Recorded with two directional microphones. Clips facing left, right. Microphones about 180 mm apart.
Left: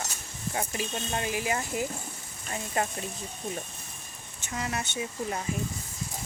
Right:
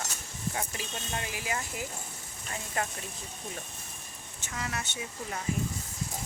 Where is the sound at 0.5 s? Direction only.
25° left (ahead or behind).